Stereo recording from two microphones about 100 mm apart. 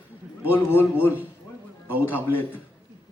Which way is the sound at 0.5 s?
20° left (ahead or behind).